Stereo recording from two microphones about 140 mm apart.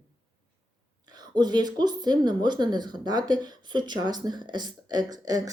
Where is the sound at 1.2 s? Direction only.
30° right (ahead or behind).